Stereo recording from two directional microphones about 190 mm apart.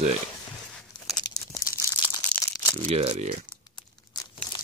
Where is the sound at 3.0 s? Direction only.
30° right (ahead or behind).